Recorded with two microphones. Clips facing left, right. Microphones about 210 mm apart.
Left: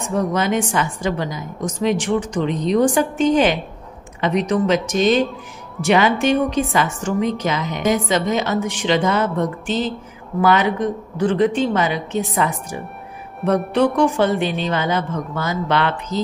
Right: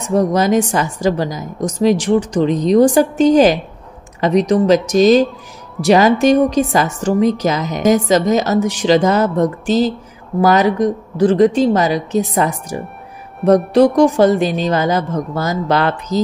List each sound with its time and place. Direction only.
0.1 s a woman's voice: 40° right (ahead or behind)